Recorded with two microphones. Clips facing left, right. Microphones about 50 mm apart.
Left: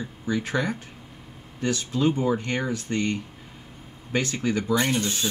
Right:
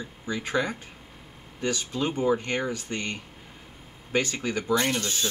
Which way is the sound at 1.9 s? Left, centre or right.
Right.